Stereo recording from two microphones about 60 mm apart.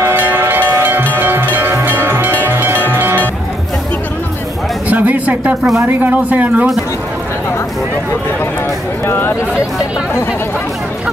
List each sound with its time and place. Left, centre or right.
0.1 s a sound: right
1.1 s music: right
4.8 s music: right
6.0 s speech: right
9.0 s speech: left